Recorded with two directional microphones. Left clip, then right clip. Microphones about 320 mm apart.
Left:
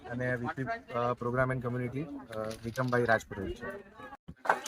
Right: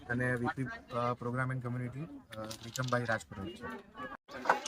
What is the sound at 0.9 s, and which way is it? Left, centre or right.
Speech, centre.